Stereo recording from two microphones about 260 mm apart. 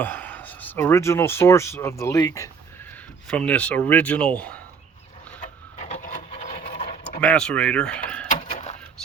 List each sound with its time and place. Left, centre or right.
0.0 s speech: centre
5.4 s wood: left
7.2 s speech: centre
8.3 s a sound: left